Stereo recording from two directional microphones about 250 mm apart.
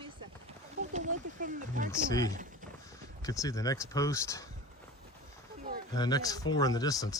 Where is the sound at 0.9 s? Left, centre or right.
Right.